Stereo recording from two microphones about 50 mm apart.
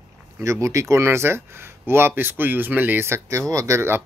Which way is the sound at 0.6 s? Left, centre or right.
Right.